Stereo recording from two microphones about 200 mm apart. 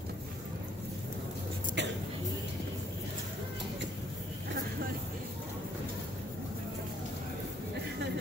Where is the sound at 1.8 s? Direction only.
60° right (ahead or behind).